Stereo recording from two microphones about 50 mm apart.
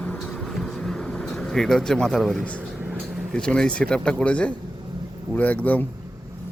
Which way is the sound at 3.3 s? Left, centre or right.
Centre.